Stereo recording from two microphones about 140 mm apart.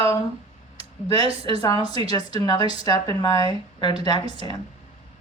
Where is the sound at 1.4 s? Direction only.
30° left (ahead or behind).